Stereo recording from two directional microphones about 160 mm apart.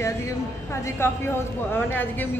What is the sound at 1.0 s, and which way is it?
Speech, 15° left (ahead or behind).